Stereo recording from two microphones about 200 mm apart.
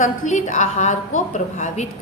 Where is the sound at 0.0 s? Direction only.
35° left (ahead or behind).